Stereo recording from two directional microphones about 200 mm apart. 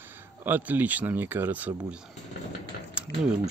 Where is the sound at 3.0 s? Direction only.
5° right (ahead or behind).